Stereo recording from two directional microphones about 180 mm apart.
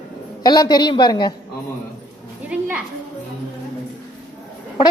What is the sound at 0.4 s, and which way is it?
Speech, 20° left (ahead or behind).